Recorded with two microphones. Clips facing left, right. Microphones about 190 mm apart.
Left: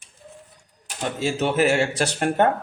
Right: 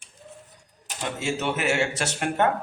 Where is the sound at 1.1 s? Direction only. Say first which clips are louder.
Left 6 dB; 35° left (ahead or behind).